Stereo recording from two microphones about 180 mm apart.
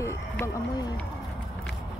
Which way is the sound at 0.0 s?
20° left (ahead or behind).